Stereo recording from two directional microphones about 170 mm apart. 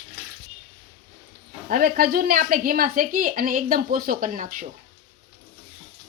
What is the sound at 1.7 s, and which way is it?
Speech, 60° right (ahead or behind).